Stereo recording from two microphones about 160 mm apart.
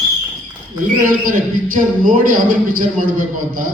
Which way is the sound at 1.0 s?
60° right (ahead or behind).